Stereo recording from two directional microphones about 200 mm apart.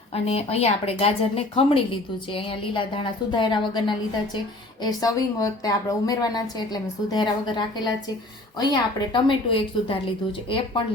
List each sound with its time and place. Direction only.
0.1 s a woman's voice: 30° left (ahead or behind)